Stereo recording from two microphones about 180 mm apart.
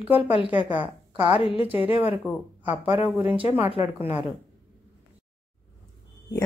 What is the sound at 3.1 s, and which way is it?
Speech, 10° right (ahead or behind).